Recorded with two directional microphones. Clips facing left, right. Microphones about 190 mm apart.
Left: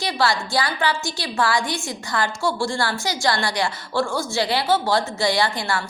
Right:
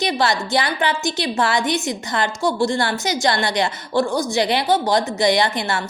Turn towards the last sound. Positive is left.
turn(degrees=-20)  # may be behind; listen again after turning